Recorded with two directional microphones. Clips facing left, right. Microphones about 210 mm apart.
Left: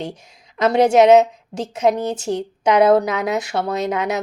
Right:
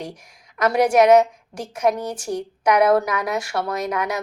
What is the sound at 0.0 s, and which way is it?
A woman's voice, 25° left (ahead or behind).